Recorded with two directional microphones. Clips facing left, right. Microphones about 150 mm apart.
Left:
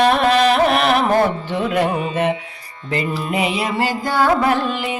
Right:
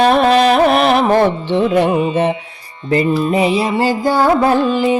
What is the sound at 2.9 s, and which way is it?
Mantra, 35° right (ahead or behind).